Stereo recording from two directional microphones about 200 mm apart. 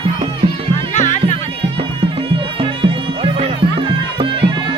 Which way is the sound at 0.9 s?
35° left (ahead or behind).